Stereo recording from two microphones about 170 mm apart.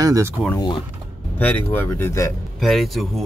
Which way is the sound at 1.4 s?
10° left (ahead or behind).